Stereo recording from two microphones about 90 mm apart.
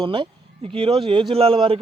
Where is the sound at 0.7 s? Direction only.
90° right.